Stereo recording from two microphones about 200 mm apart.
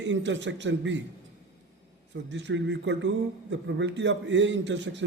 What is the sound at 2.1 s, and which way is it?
A man's voice, 60° right (ahead or behind).